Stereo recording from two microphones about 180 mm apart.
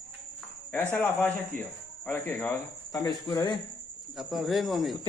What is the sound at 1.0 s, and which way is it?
Speech, 10° left (ahead or behind).